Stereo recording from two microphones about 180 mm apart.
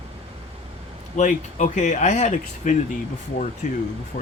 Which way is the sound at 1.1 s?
45° left (ahead or behind).